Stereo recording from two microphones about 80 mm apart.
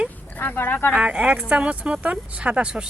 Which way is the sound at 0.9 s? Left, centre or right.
Centre.